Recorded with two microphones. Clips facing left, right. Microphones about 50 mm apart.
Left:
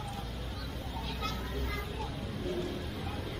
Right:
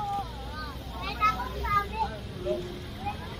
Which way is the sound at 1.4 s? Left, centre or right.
Right.